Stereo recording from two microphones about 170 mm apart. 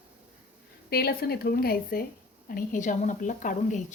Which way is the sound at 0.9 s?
65° left (ahead or behind).